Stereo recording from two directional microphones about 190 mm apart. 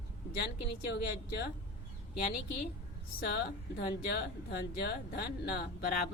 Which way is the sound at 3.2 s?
55° left (ahead or behind).